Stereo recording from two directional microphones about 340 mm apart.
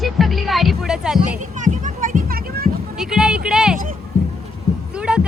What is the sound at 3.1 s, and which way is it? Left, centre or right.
Speech, centre.